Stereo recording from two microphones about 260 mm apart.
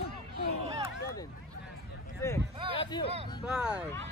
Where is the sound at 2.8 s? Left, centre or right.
Left.